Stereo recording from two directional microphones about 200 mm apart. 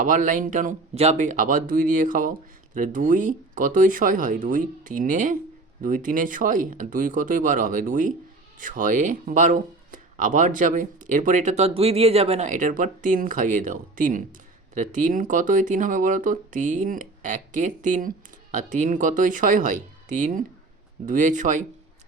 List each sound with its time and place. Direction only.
0.0 s speech: 40° right (ahead or behind)